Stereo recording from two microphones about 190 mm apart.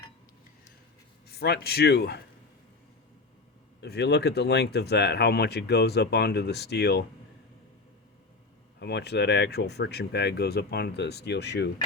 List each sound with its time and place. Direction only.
1.3 s speech: 55° left (ahead or behind)
3.8 s speech: 60° left (ahead or behind)
8.8 s speech: 60° left (ahead or behind)